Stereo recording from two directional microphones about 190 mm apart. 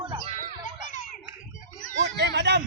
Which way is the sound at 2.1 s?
60° right (ahead or behind).